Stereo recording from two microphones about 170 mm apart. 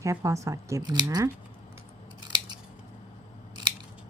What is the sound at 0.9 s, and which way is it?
Speech, 20° right (ahead or behind).